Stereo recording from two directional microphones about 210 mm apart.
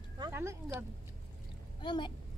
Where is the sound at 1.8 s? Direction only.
20° left (ahead or behind).